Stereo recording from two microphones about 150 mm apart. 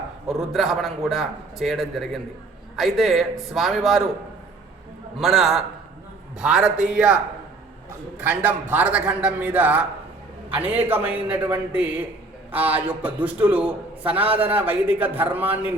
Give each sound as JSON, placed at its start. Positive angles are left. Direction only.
{"t": 0.3, "sound": "a man's voice", "side_deg": 0}
{"t": 5.1, "sound": "a man's voice", "side_deg": 0}
{"t": 8.2, "sound": "a man's voice", "side_deg": -15}
{"t": 10.8, "sound": "a man's voice", "side_deg": -10}
{"t": 14.2, "sound": "a man's voice", "side_deg": -40}
{"t": 14.4, "sound": "a man's voice", "side_deg": -10}